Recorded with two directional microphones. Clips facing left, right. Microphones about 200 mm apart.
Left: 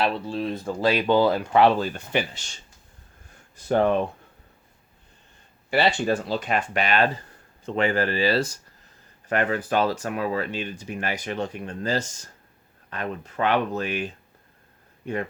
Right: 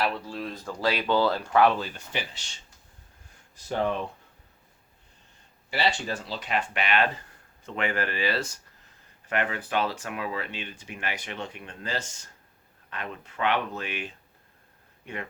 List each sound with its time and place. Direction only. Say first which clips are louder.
0.0 s speech: left 5 dB; 25° left (ahead or behind)
1.8 s speech: left 8 dB; 55° left (ahead or behind)
5.7 s speech: left 7 dB; 55° left (ahead or behind); by 14.1 s 40° left (ahead or behind)